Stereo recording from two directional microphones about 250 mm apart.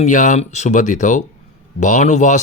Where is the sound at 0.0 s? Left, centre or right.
Left.